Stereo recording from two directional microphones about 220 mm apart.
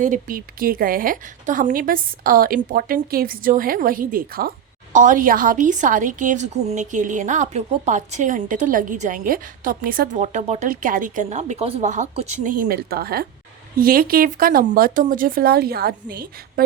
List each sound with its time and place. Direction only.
0.0 s a woman's voice: 40° right (ahead or behind)